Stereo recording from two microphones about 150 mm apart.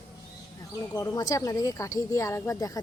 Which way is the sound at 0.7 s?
20° left (ahead or behind).